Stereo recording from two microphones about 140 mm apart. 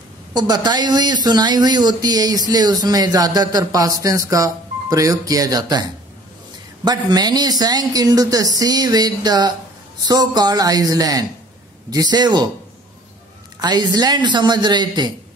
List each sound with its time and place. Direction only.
0.3 s speech: 30° right (ahead or behind)
13.6 s a man's voice: 30° right (ahead or behind)